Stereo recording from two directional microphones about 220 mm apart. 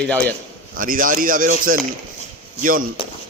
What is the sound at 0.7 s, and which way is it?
Speech, 40° right (ahead or behind).